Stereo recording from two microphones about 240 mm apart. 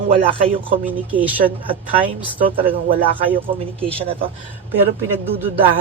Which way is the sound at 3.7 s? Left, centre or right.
Right.